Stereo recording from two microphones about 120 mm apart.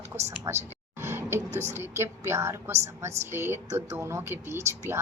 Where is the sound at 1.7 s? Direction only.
20° right (ahead or behind).